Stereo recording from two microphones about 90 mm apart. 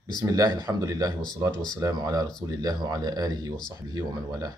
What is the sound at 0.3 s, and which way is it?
Speech, 40° right (ahead or behind).